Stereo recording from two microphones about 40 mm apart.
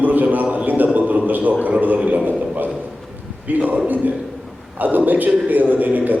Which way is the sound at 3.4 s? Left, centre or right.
Right.